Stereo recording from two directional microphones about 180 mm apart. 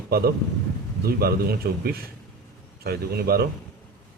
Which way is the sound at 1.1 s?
60° right (ahead or behind).